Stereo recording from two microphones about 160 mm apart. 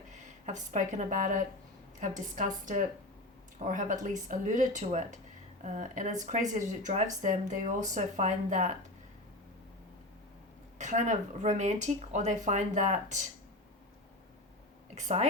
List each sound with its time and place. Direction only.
0.1 s speech: 50° right (ahead or behind)
10.8 s speech: 50° right (ahead or behind)
14.9 s speech: 45° right (ahead or behind)